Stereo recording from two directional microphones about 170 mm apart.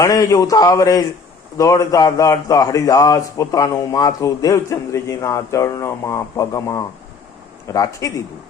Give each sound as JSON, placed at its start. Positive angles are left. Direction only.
{"t": 0.0, "sound": "speech", "side_deg": 20}